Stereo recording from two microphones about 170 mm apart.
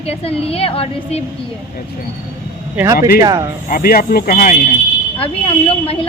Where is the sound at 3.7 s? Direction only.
55° left (ahead or behind).